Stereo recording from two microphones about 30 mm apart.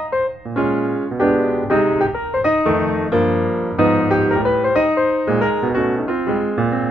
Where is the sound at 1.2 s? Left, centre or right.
Right.